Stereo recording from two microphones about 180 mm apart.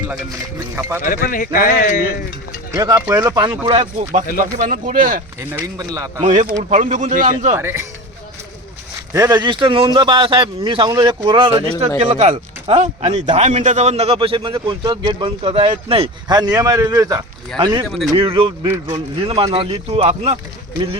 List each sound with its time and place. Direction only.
0.8 s speech: 15° right (ahead or behind)
1.0 s speech: 50° left (ahead or behind)
2.7 s speech: 20° right (ahead or behind)
4.4 s speech: 45° right (ahead or behind)
5.4 s speech: 15° right (ahead or behind)
6.2 s speech: 45° right (ahead or behind)
7.5 s speech: 15° right (ahead or behind)
9.1 s speech: 20° right (ahead or behind)
11.9 s speech: 40° right (ahead or behind)
17.8 s speech: centre (ahead or behind)
18.1 s speech: 30° right (ahead or behind)